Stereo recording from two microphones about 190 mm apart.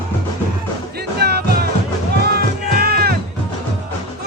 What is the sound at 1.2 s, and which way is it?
Music, 55° right (ahead or behind).